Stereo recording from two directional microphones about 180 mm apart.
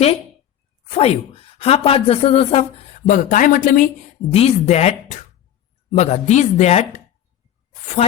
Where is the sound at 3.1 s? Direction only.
45° left (ahead or behind).